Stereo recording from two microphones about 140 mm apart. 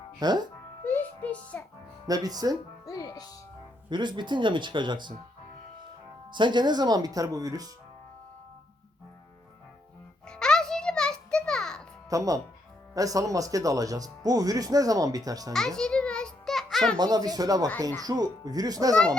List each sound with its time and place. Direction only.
0.2 s speech: 30° right (ahead or behind)
0.9 s a sound: 10° left (ahead or behind)
2.0 s speech: 25° right (ahead or behind)
2.8 s music: 25° left (ahead or behind)
3.8 s speech: 35° right (ahead or behind)
6.3 s speech: 35° right (ahead or behind)
10.2 s music: 5° left (ahead or behind)
12.0 s speech: 25° right (ahead or behind)
15.5 s music: 5° left (ahead or behind)
17.0 s speech: 30° right (ahead or behind)